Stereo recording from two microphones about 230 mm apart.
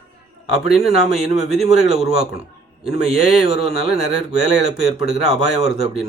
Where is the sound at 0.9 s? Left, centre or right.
Right.